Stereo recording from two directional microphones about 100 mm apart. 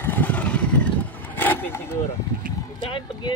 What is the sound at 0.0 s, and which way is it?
Vehicle, 20° left (ahead or behind).